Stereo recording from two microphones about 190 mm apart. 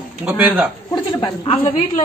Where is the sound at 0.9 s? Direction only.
25° left (ahead or behind).